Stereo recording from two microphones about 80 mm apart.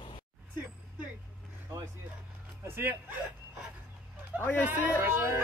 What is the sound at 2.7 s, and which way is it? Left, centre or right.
Speech, right.